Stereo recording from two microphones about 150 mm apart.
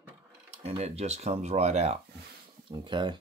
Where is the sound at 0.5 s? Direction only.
45° right (ahead or behind).